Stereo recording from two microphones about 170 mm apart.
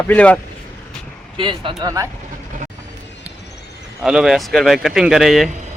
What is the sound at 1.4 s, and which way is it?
Speech, 30° right (ahead or behind).